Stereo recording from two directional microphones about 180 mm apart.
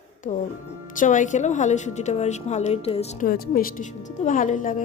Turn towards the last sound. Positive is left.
turn(degrees=45)  # may be behind; listen again after turning